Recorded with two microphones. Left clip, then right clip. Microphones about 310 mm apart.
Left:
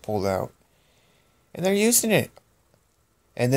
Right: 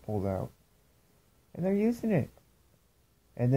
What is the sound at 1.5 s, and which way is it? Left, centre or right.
Speech, centre.